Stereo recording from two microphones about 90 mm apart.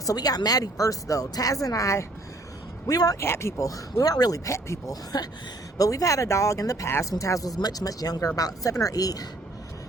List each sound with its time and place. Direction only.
0.0 s speech: 45° left (ahead or behind)
3.2 s speech: 30° left (ahead or behind)